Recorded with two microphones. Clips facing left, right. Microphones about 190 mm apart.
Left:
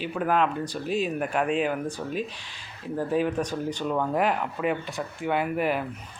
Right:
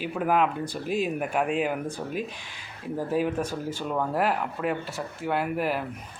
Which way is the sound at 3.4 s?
15° left (ahead or behind).